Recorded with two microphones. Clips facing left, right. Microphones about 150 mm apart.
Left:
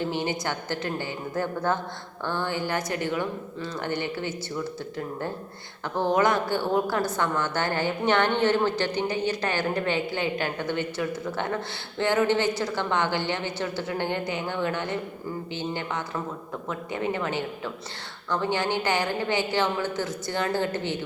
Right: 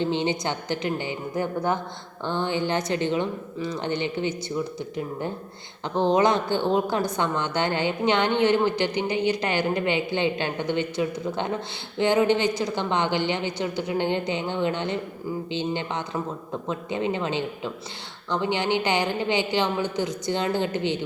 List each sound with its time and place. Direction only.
0.0 s a woman's voice: 20° right (ahead or behind)